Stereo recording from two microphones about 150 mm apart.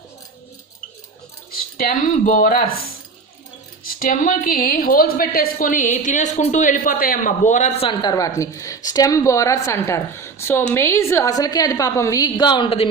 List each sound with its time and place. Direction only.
1.5 s speech: 70° left (ahead or behind)
4.0 s a woman's voice: 65° left (ahead or behind)
7.8 s a woman's voice: 30° left (ahead or behind)